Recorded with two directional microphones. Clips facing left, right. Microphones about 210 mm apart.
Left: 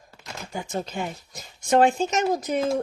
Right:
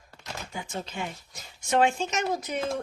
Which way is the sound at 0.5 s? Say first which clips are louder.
Left 7 dB; 40° left (ahead or behind).